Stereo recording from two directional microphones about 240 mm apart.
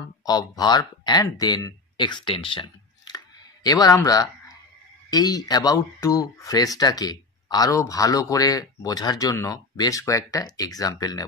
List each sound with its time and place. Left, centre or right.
0.2 s speech: centre